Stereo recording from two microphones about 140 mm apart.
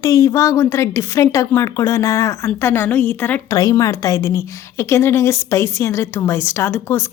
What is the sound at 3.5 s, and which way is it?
A woman's voice, 25° left (ahead or behind).